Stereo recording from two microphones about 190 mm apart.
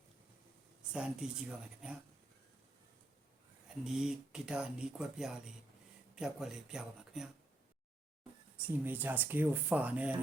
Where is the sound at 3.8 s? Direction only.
5° right (ahead or behind).